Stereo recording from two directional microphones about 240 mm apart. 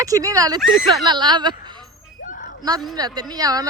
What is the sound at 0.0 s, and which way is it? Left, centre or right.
Speech, centre.